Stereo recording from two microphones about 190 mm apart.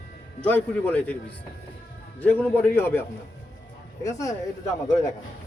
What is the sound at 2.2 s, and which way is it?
Speech, 10° left (ahead or behind).